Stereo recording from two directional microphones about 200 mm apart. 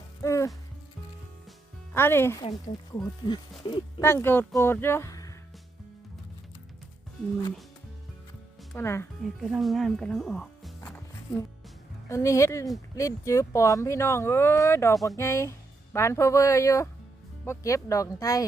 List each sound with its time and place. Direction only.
0.2 s music: 15° left (ahead or behind)
1.9 s speech: 10° left (ahead or behind)
3.2 s speech: 25° left (ahead or behind)
4.0 s speech: 10° left (ahead or behind)
8.7 s speech: 10° left (ahead or behind)
9.4 s speech: centre (ahead or behind)
10.8 s music: 10° left (ahead or behind)
12.0 s speech: 15° left (ahead or behind)